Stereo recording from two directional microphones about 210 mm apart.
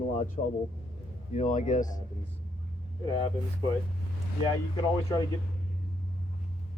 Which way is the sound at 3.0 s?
25° left (ahead or behind).